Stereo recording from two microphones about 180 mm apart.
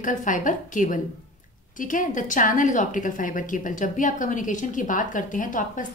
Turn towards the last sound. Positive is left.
turn(degrees=45)  # may be behind; listen again after turning